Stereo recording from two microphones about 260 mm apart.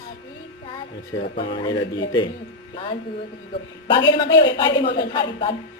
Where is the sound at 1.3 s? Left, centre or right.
Centre.